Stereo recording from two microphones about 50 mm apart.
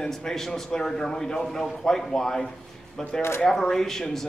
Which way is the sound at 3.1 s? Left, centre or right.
Left.